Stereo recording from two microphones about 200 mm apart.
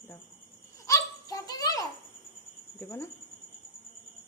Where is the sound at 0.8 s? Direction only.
15° left (ahead or behind).